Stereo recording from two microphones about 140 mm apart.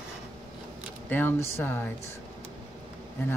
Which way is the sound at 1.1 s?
15° left (ahead or behind).